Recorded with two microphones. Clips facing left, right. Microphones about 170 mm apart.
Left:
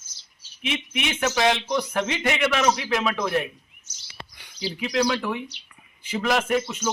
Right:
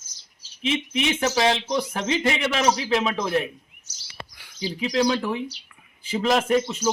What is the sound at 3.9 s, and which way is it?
Bird vocalization, 35° right (ahead or behind).